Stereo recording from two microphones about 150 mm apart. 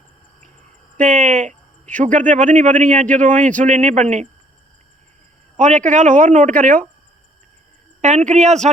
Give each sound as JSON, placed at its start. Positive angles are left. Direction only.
{"t": 0.9, "sound": "a sound", "side_deg": -55}
{"t": 2.0, "sound": "speech", "side_deg": -60}
{"t": 5.5, "sound": "speech", "side_deg": -50}
{"t": 8.0, "sound": "speech", "side_deg": -55}